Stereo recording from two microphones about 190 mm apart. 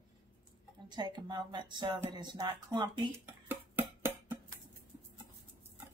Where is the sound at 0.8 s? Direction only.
25° right (ahead or behind).